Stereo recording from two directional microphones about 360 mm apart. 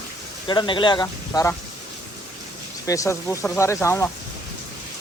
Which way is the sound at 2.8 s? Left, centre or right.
Centre.